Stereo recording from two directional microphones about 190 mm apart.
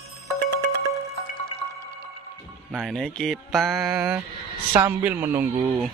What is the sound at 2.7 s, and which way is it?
A man's voice, centre (ahead or behind).